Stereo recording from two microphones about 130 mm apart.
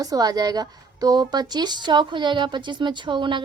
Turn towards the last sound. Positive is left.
turn(degrees=-40)  # may be behind; listen again after turning